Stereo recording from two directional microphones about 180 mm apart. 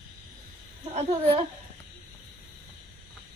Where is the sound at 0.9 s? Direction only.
35° right (ahead or behind).